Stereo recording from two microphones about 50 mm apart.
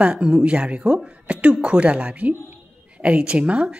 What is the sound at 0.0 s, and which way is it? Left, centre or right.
A woman's voice, right.